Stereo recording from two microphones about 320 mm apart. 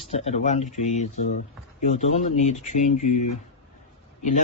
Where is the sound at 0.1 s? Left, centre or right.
Centre.